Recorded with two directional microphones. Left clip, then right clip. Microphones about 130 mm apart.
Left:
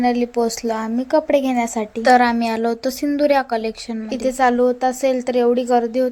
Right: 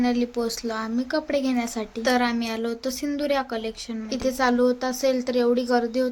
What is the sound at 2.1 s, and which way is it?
A woman's voice, 50° left (ahead or behind).